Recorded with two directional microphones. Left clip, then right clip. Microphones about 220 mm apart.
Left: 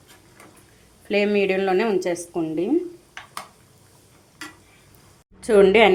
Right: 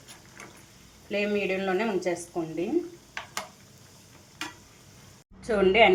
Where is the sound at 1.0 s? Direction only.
50° left (ahead or behind).